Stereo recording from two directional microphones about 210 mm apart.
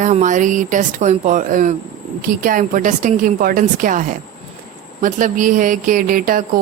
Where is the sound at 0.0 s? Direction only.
35° right (ahead or behind).